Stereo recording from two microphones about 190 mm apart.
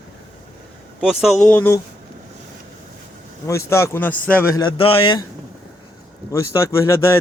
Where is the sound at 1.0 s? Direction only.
Centre (ahead or behind).